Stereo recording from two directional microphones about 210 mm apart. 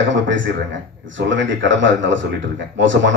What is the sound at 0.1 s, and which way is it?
Speech, 60° right (ahead or behind).